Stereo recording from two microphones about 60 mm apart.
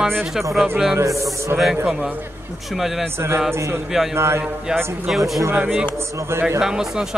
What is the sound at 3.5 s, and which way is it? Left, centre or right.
Speech, right.